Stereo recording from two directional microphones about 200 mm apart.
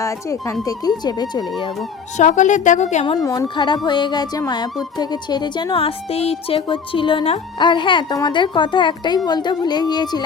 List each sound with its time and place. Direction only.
0.0 s speech: 15° left (ahead or behind)
2.1 s speech: 35° left (ahead or behind)
3.2 s speech: 20° left (ahead or behind)